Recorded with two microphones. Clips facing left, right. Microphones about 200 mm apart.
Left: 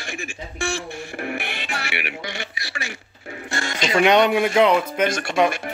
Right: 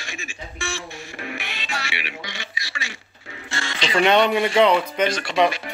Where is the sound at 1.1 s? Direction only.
55° left (ahead or behind).